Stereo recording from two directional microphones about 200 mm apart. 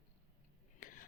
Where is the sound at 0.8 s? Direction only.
45° left (ahead or behind).